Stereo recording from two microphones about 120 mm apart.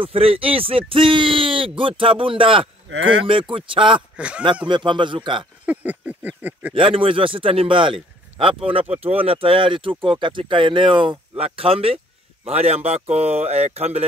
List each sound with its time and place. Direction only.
0.0 s speech: 50° right (ahead or behind)
5.7 s a sound: 15° right (ahead or behind)
6.7 s speech: 50° right (ahead or behind)